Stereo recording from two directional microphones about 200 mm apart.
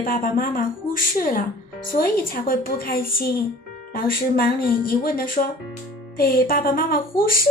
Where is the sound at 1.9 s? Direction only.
45° left (ahead or behind).